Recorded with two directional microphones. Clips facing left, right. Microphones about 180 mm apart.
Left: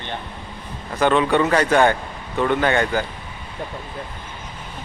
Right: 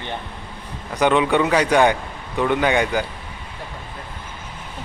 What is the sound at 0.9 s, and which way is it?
Speech, 15° right (ahead or behind).